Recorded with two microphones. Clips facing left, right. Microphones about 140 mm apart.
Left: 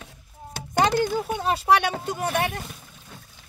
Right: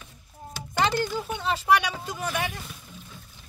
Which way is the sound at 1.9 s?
50° left (ahead or behind).